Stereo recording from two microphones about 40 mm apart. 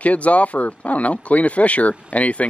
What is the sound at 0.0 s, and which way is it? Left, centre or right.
Speech, left.